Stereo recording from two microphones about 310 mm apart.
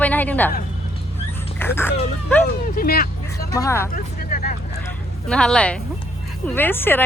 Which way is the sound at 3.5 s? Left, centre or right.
Centre.